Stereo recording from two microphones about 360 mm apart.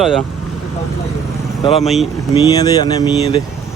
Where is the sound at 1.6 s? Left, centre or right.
Centre.